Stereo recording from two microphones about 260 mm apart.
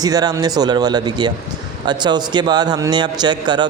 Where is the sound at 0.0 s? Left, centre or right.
Centre.